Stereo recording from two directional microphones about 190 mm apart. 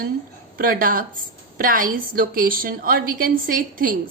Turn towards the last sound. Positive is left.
turn(degrees=-45)  # may be behind; listen again after turning